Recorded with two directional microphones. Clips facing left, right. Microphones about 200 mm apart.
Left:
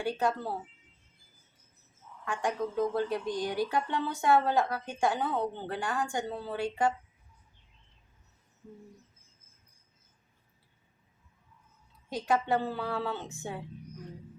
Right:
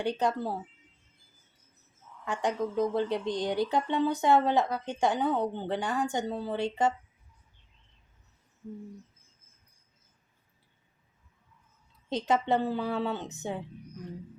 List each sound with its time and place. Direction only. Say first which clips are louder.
0.0 s speech: right 2 dB; 20° right (ahead or behind)
2.2 s speech: right 2 dB; 20° right (ahead or behind)
12.0 s speech: right 2 dB; 20° right (ahead or behind)